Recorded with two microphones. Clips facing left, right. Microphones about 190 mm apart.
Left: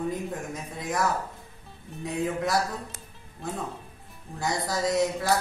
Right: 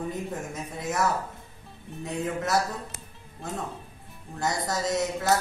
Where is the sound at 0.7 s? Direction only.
5° right (ahead or behind).